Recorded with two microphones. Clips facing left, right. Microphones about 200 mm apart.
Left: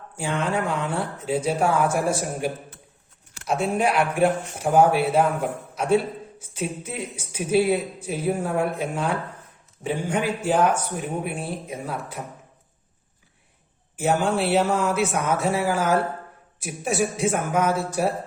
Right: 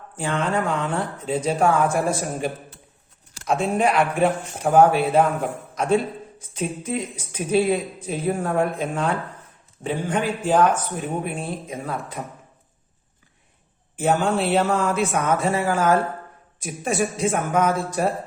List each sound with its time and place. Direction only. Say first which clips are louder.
0.2 s a man's voice: right 1 dB; 10° left (ahead or behind)
3.6 s a man's voice: right 1 dB; 10° left (ahead or behind)
13.9 s a man's voice: right 1 dB; 10° left (ahead or behind)